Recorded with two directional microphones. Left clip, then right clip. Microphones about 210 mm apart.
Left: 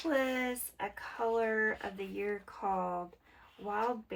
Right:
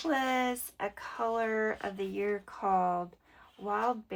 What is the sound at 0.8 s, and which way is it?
Speech, 15° right (ahead or behind).